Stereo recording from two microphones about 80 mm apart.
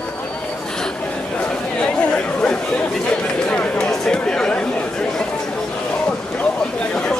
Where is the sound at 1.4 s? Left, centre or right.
Centre.